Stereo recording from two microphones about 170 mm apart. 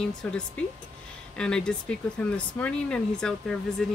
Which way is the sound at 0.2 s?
5° left (ahead or behind).